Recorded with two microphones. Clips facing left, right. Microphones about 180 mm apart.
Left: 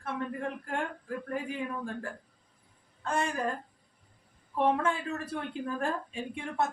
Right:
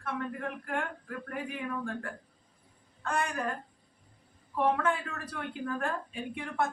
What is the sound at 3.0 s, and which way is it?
Speech, 25° left (ahead or behind).